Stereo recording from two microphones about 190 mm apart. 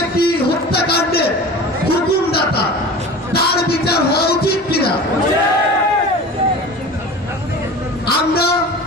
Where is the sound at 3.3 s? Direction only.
55° left (ahead or behind).